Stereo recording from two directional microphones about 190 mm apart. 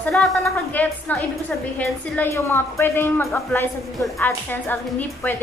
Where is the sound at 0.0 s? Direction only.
Centre (ahead or behind).